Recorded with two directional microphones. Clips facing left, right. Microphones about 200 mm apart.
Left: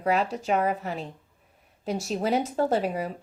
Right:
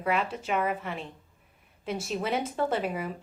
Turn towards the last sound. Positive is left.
turn(degrees=35)  # may be behind; listen again after turning